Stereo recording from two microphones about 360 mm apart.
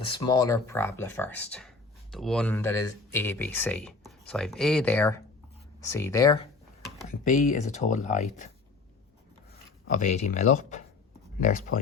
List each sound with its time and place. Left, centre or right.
0.0 s speech: centre
7.1 s speech: left
9.9 s speech: left
11.7 s speech: left